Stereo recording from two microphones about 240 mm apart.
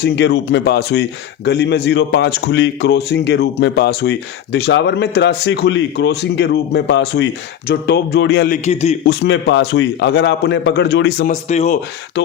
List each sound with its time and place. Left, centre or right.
0.0 s a man's voice: left
8.6 s speech: left
9.0 s a man's voice: left
11.3 s speech: left